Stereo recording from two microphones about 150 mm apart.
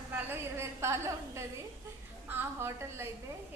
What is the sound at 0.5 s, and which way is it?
A woman's voice, 20° right (ahead or behind).